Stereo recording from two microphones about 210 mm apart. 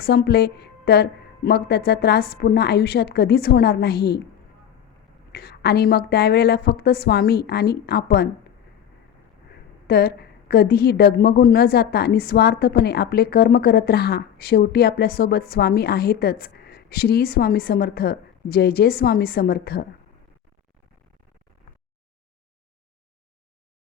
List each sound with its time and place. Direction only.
0.0 s a woman's voice: 50° left (ahead or behind)
5.3 s a woman's voice: 50° left (ahead or behind)
9.8 s a woman's voice: 50° left (ahead or behind)